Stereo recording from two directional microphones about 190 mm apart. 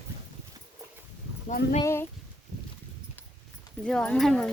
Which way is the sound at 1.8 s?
15° left (ahead or behind).